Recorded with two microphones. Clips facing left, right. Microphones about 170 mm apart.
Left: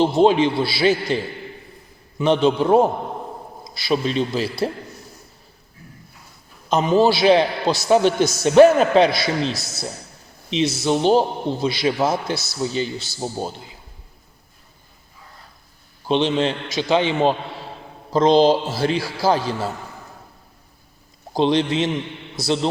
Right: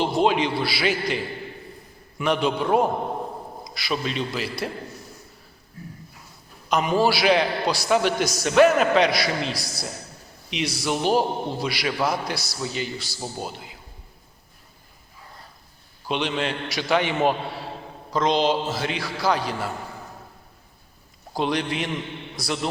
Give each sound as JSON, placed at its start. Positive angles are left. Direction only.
{"t": 0.0, "sound": "a man's voice", "side_deg": 30}
{"t": 6.7, "sound": "a man's voice", "side_deg": 25}
{"t": 16.0, "sound": "a man's voice", "side_deg": 30}
{"t": 21.3, "sound": "a man's voice", "side_deg": 25}